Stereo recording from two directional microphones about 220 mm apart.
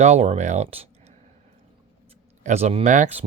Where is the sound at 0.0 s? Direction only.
30° right (ahead or behind).